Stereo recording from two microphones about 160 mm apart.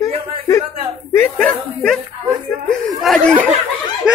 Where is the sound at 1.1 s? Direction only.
10° left (ahead or behind).